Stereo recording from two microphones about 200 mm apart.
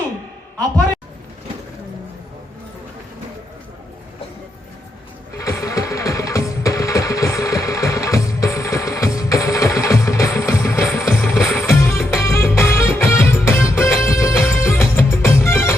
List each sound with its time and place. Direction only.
5.4 s music: 15° left (ahead or behind)
11.0 s music: centre (ahead or behind)
11.6 s music: 10° left (ahead or behind)